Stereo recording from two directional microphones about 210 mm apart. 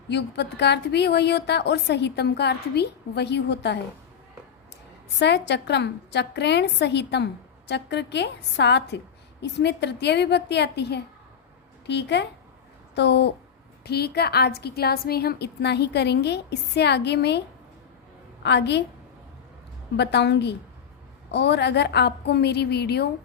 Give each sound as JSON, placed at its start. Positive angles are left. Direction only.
{"t": 0.1, "sound": "a woman's voice", "side_deg": 55}
{"t": 5.2, "sound": "a woman's voice", "side_deg": 55}
{"t": 18.4, "sound": "a woman's voice", "side_deg": 55}
{"t": 20.0, "sound": "a woman's voice", "side_deg": 55}